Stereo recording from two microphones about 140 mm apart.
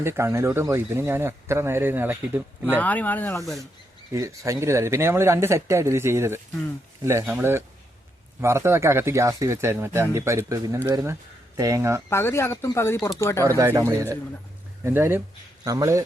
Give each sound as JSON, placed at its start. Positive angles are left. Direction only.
{"t": 0.0, "sound": "speech", "side_deg": -20}
{"t": 2.7, "sound": "speech", "side_deg": 10}
{"t": 4.1, "sound": "speech", "side_deg": -20}
{"t": 12.0, "sound": "speech", "side_deg": 20}
{"t": 13.4, "sound": "speech", "side_deg": -20}